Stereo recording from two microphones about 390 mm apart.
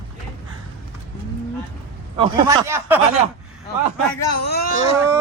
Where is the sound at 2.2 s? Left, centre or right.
Centre.